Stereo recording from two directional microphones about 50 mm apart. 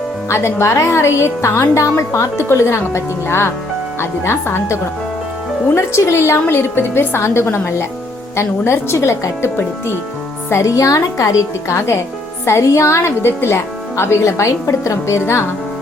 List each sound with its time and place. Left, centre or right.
0.3 s speech: left
5.7 s speech: left
6.5 s a woman's voice: left
10.5 s a woman's voice: left
12.5 s speech: left